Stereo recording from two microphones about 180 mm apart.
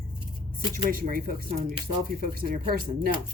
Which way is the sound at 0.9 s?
50° right (ahead or behind).